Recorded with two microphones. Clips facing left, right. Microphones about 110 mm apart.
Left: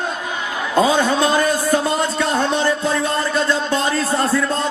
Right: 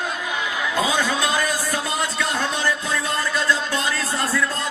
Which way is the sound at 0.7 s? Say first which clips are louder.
Left 8 dB; 30° left (ahead or behind).